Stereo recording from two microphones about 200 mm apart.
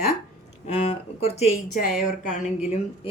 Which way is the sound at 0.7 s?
30° left (ahead or behind).